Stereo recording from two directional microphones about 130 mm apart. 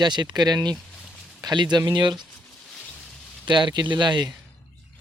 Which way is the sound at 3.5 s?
35° right (ahead or behind).